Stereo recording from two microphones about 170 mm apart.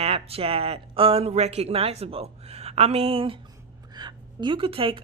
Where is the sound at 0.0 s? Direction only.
35° right (ahead or behind).